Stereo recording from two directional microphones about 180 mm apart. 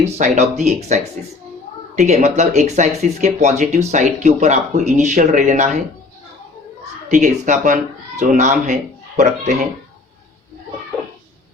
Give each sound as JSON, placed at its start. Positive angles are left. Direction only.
{"t": 0.0, "sound": "speech", "side_deg": -40}
{"t": 7.1, "sound": "speech", "side_deg": -40}